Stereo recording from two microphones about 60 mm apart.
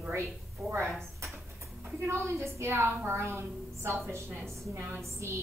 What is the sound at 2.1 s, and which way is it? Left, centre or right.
A woman's voice, right.